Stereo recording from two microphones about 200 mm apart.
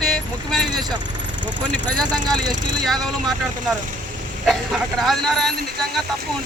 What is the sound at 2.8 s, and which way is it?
Speech, centre (ahead or behind).